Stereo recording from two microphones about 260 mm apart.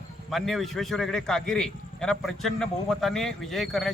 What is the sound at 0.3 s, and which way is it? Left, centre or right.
A man's voice, centre.